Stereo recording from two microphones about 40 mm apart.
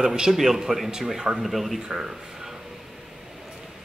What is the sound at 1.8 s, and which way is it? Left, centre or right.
Speech, centre.